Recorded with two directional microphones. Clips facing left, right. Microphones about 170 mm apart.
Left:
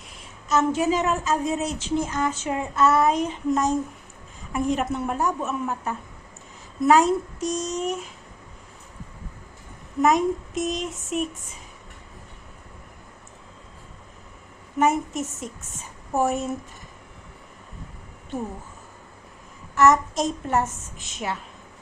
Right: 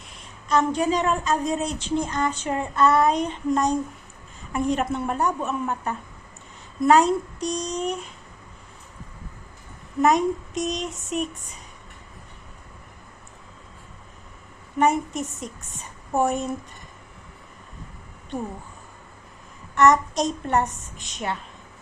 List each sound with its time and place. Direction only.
0.1 s a woman's voice: 5° left (ahead or behind)
10.0 s a woman's voice: centre (ahead or behind)
14.8 s a woman's voice: centre (ahead or behind)
19.7 s a woman's voice: centre (ahead or behind)